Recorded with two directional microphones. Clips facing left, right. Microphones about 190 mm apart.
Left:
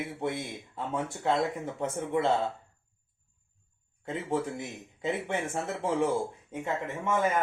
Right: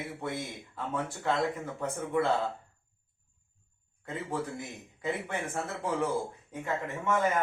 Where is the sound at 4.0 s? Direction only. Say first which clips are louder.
Left 4 dB; 25° left (ahead or behind).